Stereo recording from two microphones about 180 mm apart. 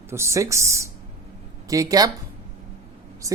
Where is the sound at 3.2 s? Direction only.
20° right (ahead or behind).